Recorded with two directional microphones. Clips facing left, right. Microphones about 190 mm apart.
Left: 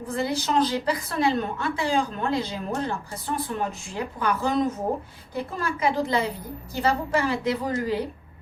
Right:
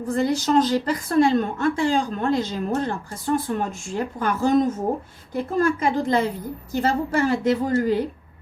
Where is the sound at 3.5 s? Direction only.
45° right (ahead or behind).